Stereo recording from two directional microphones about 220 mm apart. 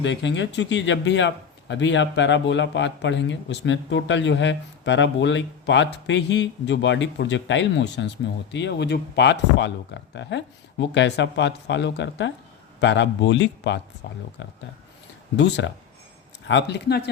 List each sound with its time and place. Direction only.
0.0 s speech: 55° left (ahead or behind)